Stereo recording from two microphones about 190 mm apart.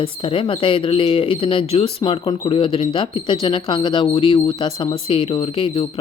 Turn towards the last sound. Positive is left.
turn(degrees=25)  # may be behind; listen again after turning